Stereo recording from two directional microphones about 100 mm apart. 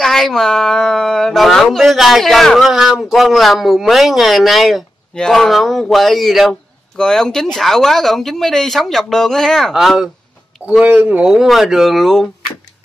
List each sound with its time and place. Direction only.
0.0 s speech: 5° left (ahead or behind)
10.8 s speech: 15° right (ahead or behind)